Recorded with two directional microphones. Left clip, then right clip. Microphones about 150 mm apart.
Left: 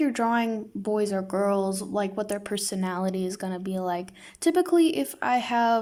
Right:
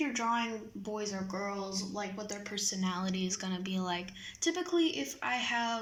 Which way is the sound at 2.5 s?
75° left (ahead or behind).